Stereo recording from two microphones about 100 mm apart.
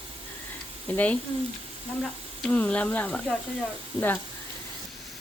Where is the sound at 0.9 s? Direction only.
15° left (ahead or behind).